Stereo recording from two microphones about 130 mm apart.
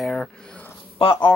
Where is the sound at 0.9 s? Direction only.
40° left (ahead or behind).